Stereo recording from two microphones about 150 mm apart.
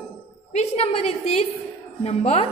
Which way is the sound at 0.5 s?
45° left (ahead or behind).